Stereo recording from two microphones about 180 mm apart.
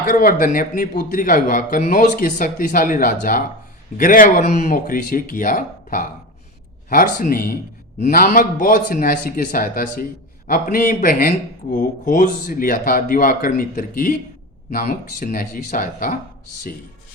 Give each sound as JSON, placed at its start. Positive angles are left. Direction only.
{"t": 0.0, "sound": "speech", "side_deg": 50}